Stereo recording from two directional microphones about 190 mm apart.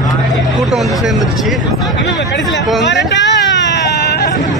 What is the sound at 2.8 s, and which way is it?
Hubbub, 70° left (ahead or behind).